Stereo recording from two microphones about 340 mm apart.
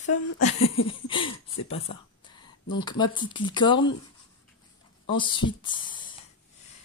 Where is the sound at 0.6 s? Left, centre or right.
Left.